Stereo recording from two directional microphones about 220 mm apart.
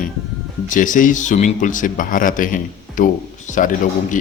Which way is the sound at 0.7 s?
35° left (ahead or behind).